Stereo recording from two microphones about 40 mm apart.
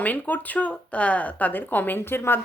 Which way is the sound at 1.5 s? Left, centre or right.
Left.